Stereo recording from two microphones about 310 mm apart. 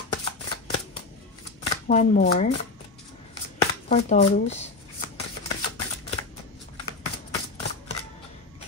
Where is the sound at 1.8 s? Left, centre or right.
Left.